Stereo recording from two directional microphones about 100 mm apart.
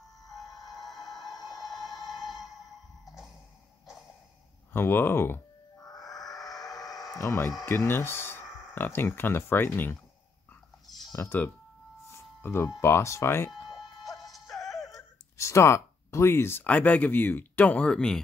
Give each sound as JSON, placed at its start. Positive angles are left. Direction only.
{"t": 0.7, "sound": "music", "side_deg": 0}
{"t": 4.7, "sound": "a sound", "side_deg": 20}
{"t": 6.7, "sound": "a sound", "side_deg": 40}
{"t": 7.2, "sound": "speech", "side_deg": 30}
{"t": 11.1, "sound": "speech", "side_deg": 25}
{"t": 14.1, "sound": "music", "side_deg": 0}
{"t": 14.9, "sound": "speech", "side_deg": 30}